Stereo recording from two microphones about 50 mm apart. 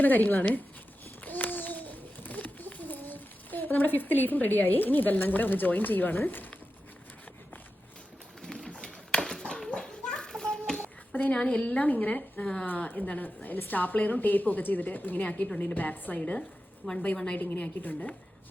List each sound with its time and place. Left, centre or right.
0.0 s a woman's voice: left
1.2 s babbling: left
6.2 s a woman's voice: left
8.4 s a sound: centre
11.1 s a sound: left
11.3 s a woman's voice: left
16.8 s a woman's voice: centre
17.3 s a woman's voice: left